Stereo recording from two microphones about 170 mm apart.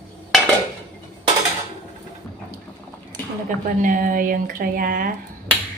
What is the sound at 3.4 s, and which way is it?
Speech, 50° right (ahead or behind).